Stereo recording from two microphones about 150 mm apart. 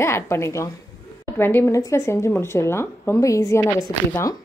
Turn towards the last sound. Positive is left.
turn(degrees=20)  # may be behind; listen again after turning